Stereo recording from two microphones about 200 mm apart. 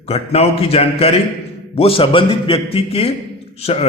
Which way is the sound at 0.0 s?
30° left (ahead or behind).